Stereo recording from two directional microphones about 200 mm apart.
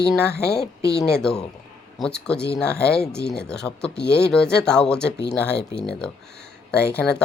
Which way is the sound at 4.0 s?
55° left (ahead or behind).